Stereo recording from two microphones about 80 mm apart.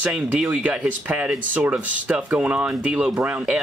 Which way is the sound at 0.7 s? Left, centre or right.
Centre.